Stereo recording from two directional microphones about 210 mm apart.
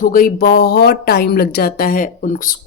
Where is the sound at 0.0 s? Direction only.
45° left (ahead or behind).